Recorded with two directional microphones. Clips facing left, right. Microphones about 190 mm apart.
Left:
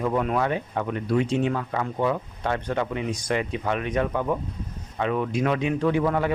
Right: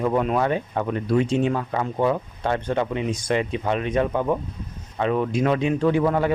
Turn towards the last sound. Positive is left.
turn(degrees=-35)  # may be behind; listen again after turning